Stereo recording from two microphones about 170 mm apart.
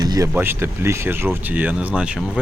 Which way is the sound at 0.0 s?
25° right (ahead or behind).